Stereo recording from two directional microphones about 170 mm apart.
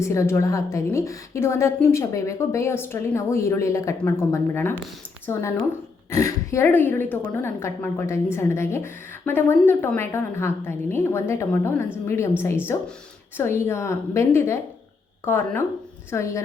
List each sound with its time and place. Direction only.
0.0 s a woman's voice: 15° left (ahead or behind)